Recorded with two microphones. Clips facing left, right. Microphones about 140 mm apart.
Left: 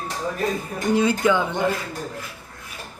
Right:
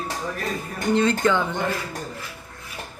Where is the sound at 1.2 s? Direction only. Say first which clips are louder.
Left 2 dB; 10° left (ahead or behind).